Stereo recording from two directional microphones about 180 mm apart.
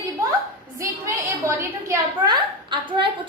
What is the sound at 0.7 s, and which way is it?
A woman's voice, 15° right (ahead or behind).